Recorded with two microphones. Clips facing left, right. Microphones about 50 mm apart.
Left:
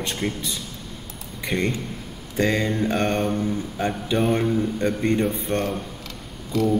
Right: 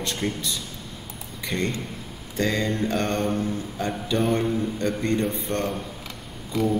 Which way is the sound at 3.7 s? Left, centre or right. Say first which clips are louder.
Left 1 dB; left.